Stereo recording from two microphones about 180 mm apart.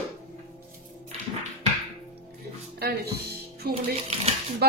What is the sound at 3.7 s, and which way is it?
Speech, 35° right (ahead or behind).